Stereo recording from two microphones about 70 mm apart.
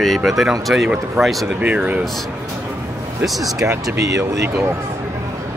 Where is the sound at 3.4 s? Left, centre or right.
Right.